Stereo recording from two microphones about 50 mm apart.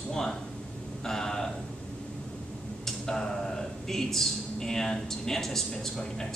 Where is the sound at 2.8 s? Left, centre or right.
Centre.